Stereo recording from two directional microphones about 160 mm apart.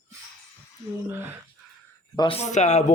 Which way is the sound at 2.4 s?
45° left (ahead or behind).